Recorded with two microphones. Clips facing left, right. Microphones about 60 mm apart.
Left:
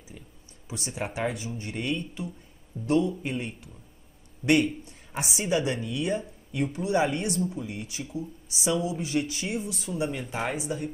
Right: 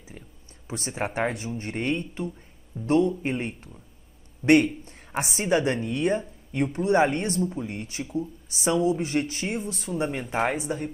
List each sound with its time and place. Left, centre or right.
0.7 s a man's voice: right
4.4 s a man's voice: centre
4.8 s a woman's voice: right